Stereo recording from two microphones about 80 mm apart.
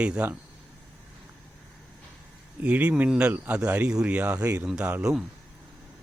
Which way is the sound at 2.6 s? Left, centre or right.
Centre.